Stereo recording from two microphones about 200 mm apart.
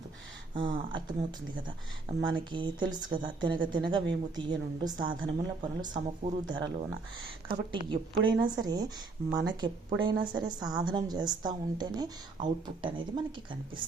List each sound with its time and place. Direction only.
0.5 s a woman's voice: 25° right (ahead or behind)
2.3 s a woman's voice: 25° right (ahead or behind)